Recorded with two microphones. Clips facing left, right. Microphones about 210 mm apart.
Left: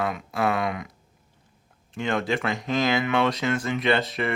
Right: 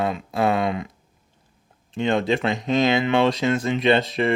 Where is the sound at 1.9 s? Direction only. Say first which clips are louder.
Right 5 dB; 25° right (ahead or behind).